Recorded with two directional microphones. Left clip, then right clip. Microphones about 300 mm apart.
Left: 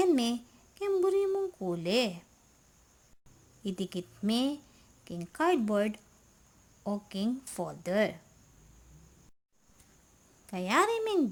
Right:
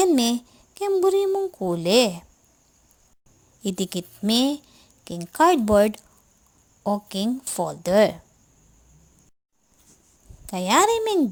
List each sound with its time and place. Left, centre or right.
0.0 s speech: centre
3.6 s speech: centre
10.4 s speech: centre